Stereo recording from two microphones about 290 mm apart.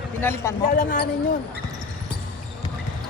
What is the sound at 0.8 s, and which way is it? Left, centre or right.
Speech, left.